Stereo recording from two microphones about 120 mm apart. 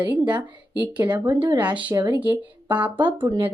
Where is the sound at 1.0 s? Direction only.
25° right (ahead or behind).